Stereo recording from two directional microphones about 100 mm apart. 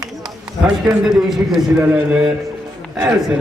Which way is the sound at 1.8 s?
15° right (ahead or behind).